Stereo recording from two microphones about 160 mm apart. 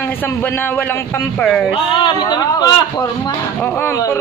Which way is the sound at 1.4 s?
5° left (ahead or behind).